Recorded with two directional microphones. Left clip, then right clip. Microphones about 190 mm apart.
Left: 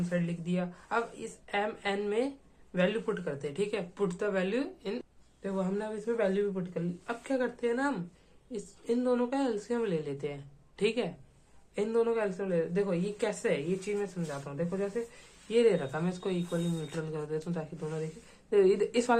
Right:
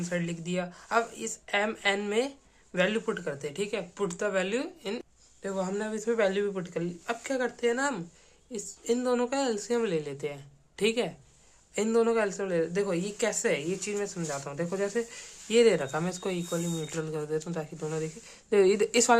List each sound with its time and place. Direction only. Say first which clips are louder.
0.1 s speech: right 3 dB; 25° right (ahead or behind)